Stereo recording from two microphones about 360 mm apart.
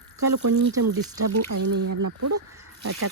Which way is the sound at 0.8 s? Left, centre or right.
Right.